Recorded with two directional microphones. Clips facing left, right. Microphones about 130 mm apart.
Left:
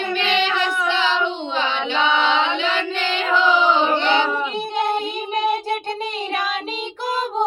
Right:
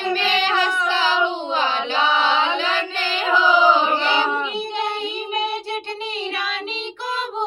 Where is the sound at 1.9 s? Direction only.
5° right (ahead or behind).